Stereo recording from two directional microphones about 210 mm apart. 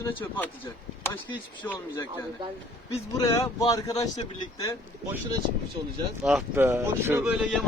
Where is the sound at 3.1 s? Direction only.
15° left (ahead or behind).